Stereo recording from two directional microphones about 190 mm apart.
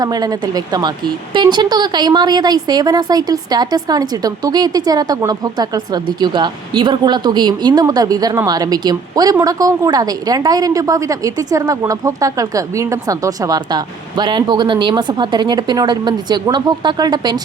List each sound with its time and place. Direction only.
0.0 s a woman's voice: 20° right (ahead or behind)